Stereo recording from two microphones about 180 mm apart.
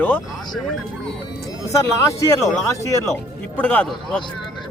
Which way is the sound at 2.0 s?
15° left (ahead or behind).